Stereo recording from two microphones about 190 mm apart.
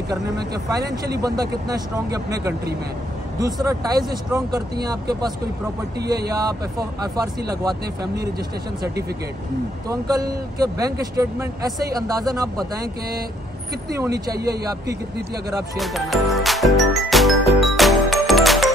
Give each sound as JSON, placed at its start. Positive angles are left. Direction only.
{"t": 0.1, "sound": "speech", "side_deg": -20}
{"t": 3.6, "sound": "speech", "side_deg": -20}
{"t": 6.3, "sound": "speech", "side_deg": -20}
{"t": 9.8, "sound": "speech", "side_deg": -20}
{"t": 13.9, "sound": "speech", "side_deg": -15}
{"t": 14.3, "sound": "a man's voice", "side_deg": -55}
{"t": 15.7, "sound": "jingle", "side_deg": 0}